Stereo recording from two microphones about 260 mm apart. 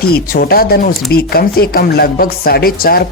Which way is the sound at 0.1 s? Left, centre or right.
Left.